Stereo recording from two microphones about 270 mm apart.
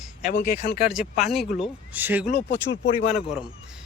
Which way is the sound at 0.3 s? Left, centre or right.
Left.